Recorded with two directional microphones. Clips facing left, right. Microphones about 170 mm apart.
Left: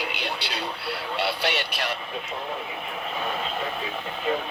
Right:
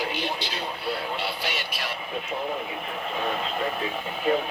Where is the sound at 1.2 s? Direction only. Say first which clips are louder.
Left 4 dB; 70° left (ahead or behind).